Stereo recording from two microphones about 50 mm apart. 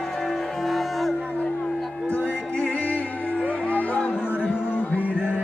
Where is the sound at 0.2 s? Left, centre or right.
Centre.